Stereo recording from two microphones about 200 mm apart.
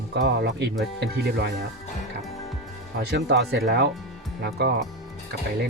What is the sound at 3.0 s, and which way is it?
Speech, 55° right (ahead or behind).